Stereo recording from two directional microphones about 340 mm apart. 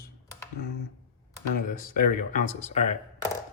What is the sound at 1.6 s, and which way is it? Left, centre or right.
Speech, left.